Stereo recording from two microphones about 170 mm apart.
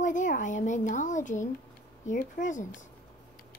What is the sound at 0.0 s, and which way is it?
A woman's voice, 50° left (ahead or behind).